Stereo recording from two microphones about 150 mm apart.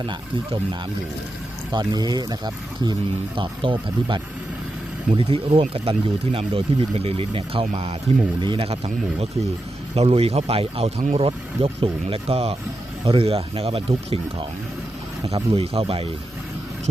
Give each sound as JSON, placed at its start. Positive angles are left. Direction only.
{"t": 0.0, "sound": "speech", "side_deg": -30}
{"t": 1.7, "sound": "speech", "side_deg": -25}